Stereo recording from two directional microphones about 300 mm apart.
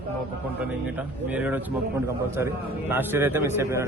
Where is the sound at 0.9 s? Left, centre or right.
Centre.